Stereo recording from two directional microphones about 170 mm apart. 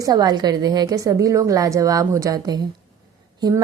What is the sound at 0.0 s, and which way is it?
A woman's voice, 20° right (ahead or behind).